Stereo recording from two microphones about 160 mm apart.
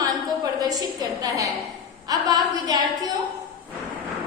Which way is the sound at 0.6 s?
25° right (ahead or behind).